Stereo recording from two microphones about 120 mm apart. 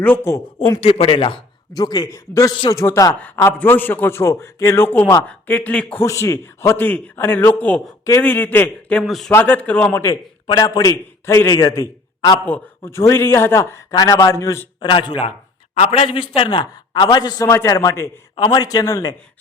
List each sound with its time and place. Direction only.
0.0 s a man's voice: 20° left (ahead or behind)
0.8 s speech: 55° left (ahead or behind)
1.7 s a man's voice: 35° left (ahead or behind); by 6.0 s 10° left (ahead or behind)
6.0 s a man's voice: 25° left (ahead or behind)
9.0 s speech: centre (ahead or behind)
9.3 s a man's voice: 15° left (ahead or behind)
9.9 s a man's voice: 25° left (ahead or behind)
14.8 s a man's voice: 40° left (ahead or behind)
15.8 s a man's voice: 60° left (ahead or behind); by 18.1 s 25° left (ahead or behind)
18.3 s a man's voice: 35° left (ahead or behind)